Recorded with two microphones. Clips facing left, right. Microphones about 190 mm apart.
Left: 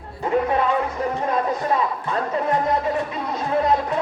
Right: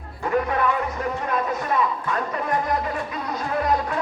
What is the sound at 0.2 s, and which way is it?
Speech, 25° left (ahead or behind).